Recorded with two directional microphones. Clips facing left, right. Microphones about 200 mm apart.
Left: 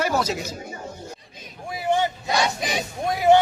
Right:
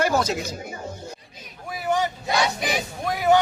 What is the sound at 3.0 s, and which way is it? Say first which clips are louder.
Speech: left 3 dB; 25° left (ahead or behind).